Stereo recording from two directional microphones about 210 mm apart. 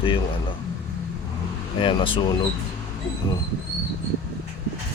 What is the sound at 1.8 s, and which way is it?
Speech, 25° left (ahead or behind).